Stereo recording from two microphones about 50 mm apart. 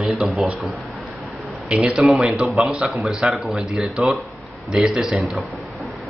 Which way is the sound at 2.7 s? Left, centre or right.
Centre.